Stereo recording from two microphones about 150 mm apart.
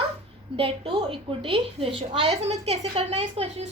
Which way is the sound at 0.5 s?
35° right (ahead or behind).